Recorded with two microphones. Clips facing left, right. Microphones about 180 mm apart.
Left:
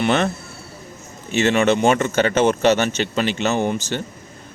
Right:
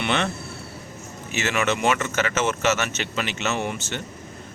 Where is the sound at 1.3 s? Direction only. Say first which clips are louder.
Left 8 dB; 30° left (ahead or behind).